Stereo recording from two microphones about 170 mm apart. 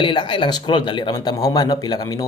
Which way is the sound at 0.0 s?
30° left (ahead or behind).